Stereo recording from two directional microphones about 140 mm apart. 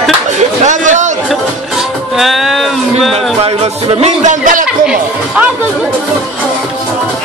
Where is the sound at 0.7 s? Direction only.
60° right (ahead or behind).